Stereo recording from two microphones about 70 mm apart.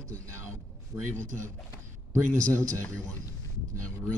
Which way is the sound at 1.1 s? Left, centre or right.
Right.